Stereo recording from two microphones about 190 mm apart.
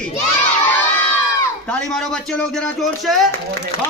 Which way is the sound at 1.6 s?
5° left (ahead or behind).